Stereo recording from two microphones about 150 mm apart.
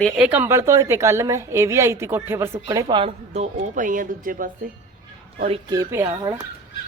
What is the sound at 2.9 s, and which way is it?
Speech, 40° right (ahead or behind).